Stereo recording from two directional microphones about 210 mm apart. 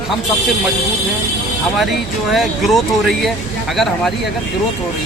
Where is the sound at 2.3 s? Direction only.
Centre (ahead or behind).